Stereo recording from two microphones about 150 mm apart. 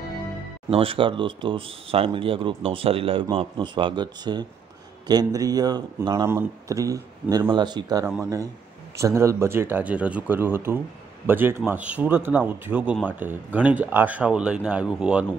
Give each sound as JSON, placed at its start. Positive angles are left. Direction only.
{"t": 0.7, "sound": "a man's voice", "side_deg": -40}